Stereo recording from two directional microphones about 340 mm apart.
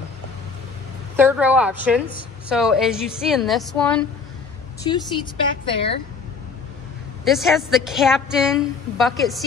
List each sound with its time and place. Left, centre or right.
1.1 s a woman's voice: centre
5.7 s speech: centre
7.2 s a woman's voice: centre